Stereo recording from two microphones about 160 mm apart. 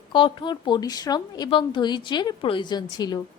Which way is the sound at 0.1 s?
30° left (ahead or behind).